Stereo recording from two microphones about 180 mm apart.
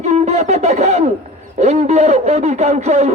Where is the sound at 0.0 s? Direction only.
35° right (ahead or behind).